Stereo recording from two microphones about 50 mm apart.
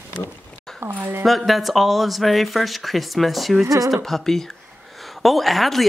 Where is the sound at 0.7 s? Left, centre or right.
Right.